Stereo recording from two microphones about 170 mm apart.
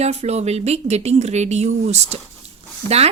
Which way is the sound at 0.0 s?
40° right (ahead or behind).